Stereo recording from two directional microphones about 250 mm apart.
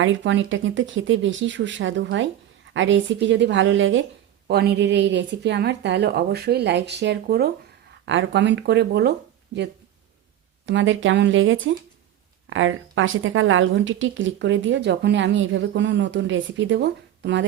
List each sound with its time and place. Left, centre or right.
0.0 s a woman's voice: right
10.7 s a woman's voice: right